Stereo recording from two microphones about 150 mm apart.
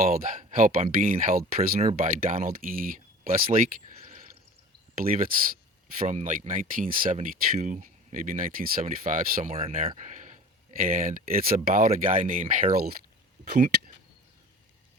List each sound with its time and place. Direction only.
0.0 s speech: 70° right (ahead or behind)
5.0 s speech: 70° right (ahead or behind)
6.0 s speech: 55° right (ahead or behind)
10.0 s speech: 55° right (ahead or behind); by 13.0 s 90° right
13.4 s speech: 75° right (ahead or behind); by 13.9 s 90° right